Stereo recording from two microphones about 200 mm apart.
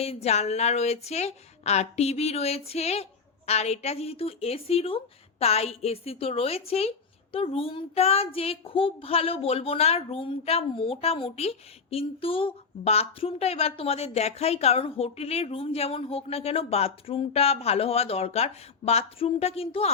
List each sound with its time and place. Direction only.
0.0 s a woman's voice: 30° left (ahead or behind)